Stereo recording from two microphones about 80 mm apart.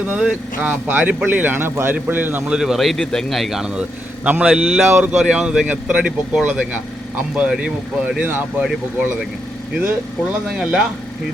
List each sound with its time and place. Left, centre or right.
0.0 s speech: centre
2.5 s speech: centre
4.2 s a man's voice: centre
4.4 s speech: centre
4.9 s speech: right
5.1 s speech: centre
8.6 s speech: centre
10.5 s speech: centre